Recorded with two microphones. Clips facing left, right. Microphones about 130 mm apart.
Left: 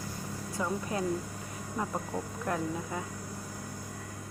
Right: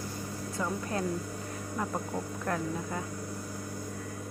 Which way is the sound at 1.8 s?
Centre (ahead or behind).